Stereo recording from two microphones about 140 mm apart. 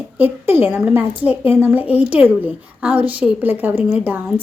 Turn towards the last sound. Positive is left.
turn(degrees=-10)  # may be behind; listen again after turning